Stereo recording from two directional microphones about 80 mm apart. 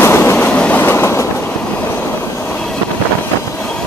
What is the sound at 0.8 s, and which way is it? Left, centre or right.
Train, left.